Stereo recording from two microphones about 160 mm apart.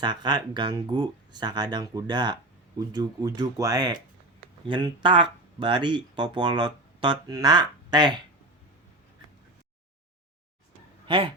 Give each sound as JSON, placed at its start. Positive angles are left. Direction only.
{"t": 0.0, "sound": "speech", "side_deg": -25}
{"t": 11.0, "sound": "speech", "side_deg": -35}